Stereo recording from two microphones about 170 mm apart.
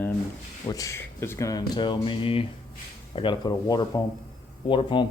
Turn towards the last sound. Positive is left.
turn(degrees=30)  # may be behind; listen again after turning